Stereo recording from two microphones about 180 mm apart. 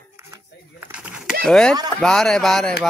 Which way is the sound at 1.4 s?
5° left (ahead or behind).